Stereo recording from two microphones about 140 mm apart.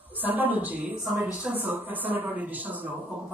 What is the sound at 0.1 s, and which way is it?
A woman's voice, 10° right (ahead or behind).